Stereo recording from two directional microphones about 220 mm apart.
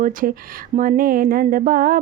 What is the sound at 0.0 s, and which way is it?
Speech, 40° right (ahead or behind).